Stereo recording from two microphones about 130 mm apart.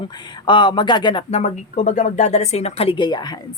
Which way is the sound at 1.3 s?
60° left (ahead or behind).